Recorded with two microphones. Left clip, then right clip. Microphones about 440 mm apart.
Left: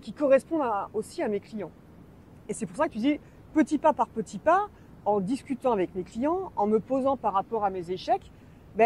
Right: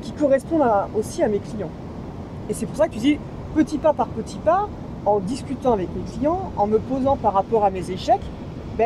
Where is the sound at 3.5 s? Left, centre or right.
Left.